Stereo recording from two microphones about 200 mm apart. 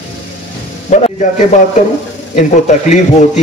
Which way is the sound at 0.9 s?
40° left (ahead or behind).